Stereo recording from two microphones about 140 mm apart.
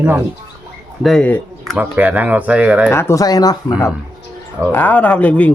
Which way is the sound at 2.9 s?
20° left (ahead or behind).